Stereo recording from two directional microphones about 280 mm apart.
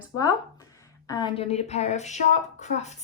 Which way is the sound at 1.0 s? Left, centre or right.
Centre.